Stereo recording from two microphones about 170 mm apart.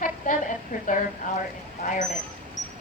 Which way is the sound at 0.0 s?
50° left (ahead or behind).